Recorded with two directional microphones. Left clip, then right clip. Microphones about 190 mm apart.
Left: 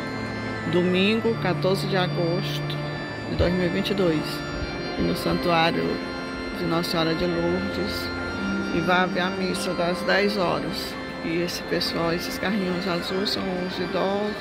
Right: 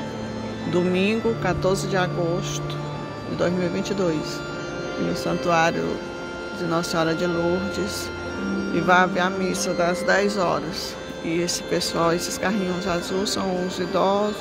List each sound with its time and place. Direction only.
0.7 s speech: centre (ahead or behind)
3.3 s speech: centre (ahead or behind)
5.2 s speech: centre (ahead or behind)
8.7 s speech: 10° right (ahead or behind)